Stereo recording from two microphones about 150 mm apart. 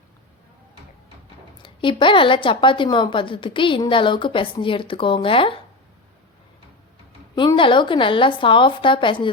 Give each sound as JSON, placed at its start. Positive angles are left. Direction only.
{"t": 1.6, "sound": "a woman's voice", "side_deg": 35}
{"t": 7.3, "sound": "a woman's voice", "side_deg": 35}